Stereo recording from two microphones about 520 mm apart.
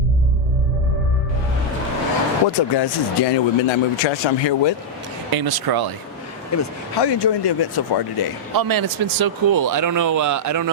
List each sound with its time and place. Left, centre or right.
2.5 s speech: left
5.3 s speech: right
6.5 s speech: left
7.0 s speech: left
8.5 s speech: right